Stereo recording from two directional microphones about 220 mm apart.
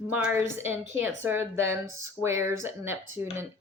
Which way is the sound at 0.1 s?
10° right (ahead or behind).